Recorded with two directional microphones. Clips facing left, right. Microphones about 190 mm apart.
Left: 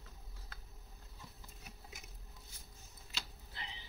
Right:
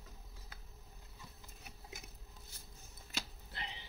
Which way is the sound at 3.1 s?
55° right (ahead or behind).